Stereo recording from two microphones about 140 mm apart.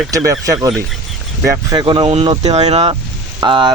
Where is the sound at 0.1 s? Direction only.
25° right (ahead or behind); by 2.4 s 40° right (ahead or behind).